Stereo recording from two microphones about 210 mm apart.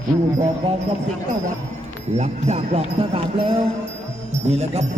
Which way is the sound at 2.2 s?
30° right (ahead or behind).